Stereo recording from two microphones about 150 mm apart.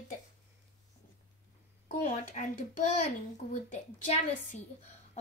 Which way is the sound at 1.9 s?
65° left (ahead or behind).